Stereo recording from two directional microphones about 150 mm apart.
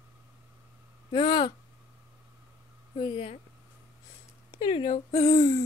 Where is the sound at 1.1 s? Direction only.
30° left (ahead or behind).